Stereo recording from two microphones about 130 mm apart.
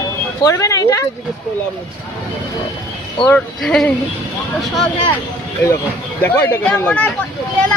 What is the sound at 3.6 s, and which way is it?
Speech, 5° left (ahead or behind).